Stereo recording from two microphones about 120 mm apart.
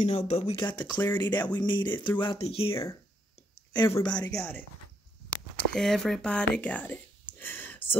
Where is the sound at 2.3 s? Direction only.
55° left (ahead or behind).